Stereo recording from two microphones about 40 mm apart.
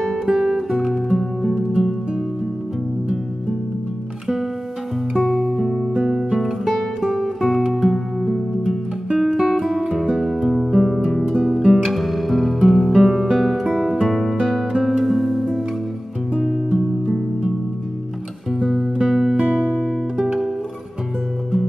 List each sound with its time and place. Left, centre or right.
0.3 s music: centre
0.9 s music: centre
1.5 s music: centre
5.2 s music: centre
11.6 s music: centre
11.9 s music: centre
18.9 s music: centre